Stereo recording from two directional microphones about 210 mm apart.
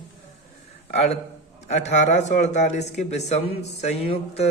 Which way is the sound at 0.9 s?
30° left (ahead or behind).